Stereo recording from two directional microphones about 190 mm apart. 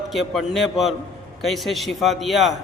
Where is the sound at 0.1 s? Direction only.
Centre (ahead or behind).